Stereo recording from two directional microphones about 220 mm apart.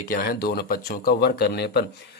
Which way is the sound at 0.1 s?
40° left (ahead or behind).